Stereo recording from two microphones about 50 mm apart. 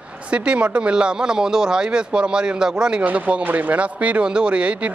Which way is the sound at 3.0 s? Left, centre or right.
Right.